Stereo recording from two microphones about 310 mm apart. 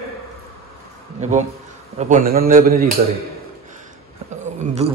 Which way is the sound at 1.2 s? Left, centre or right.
Right.